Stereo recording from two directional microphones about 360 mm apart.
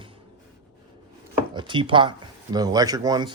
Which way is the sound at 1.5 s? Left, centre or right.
Centre.